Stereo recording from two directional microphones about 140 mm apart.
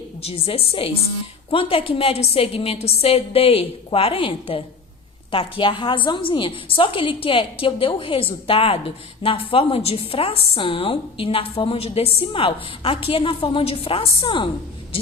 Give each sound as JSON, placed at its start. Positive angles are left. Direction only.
{"t": 0.2, "sound": "a woman's voice", "side_deg": 45}